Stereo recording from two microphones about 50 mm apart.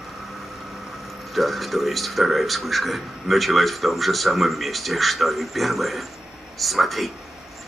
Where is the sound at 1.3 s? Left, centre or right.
Centre.